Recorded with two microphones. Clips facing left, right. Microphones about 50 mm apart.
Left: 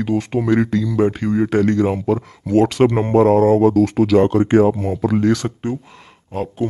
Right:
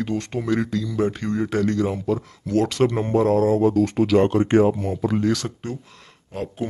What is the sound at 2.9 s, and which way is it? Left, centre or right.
Speech, left.